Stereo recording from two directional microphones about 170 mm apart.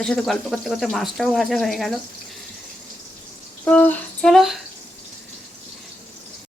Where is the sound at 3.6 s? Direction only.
10° left (ahead or behind).